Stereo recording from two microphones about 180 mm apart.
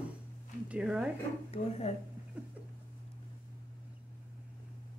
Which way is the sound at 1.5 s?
35° left (ahead or behind).